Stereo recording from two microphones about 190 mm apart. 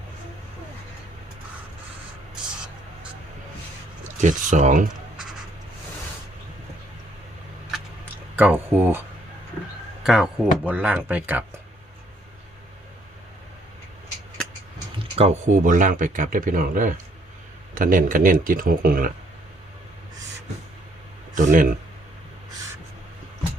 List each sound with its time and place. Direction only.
4.2 s speech: 40° right (ahead or behind)
7.7 s a sound: 10° right (ahead or behind)
10.0 s speech: 5° right (ahead or behind)
15.2 s speech: 45° right (ahead or behind)
21.3 s speech: 45° right (ahead or behind)